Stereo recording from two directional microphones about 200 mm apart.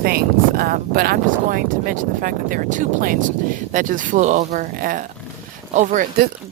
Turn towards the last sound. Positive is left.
turn(degrees=-40)  # may be behind; listen again after turning